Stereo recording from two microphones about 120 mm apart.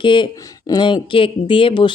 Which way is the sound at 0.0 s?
40° left (ahead or behind).